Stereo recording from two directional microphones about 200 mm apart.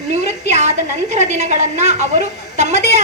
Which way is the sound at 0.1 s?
35° right (ahead or behind).